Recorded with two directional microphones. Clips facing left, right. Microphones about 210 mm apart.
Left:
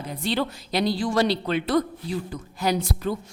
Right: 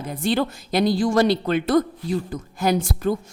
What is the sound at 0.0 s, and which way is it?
A woman's voice, 50° right (ahead or behind).